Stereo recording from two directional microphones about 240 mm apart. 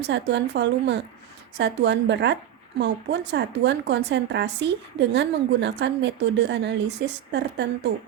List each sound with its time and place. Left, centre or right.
0.1 s a woman's voice: right